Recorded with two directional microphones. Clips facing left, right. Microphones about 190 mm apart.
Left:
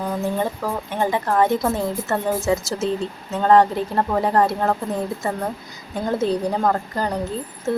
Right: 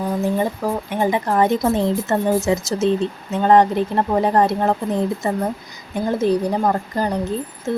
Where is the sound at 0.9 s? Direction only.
15° right (ahead or behind).